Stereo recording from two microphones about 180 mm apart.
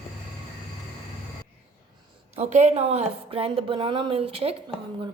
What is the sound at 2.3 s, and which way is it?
A woman's voice, 40° right (ahead or behind).